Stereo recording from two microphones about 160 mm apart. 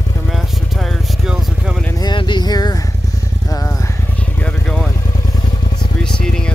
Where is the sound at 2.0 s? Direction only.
30° left (ahead or behind).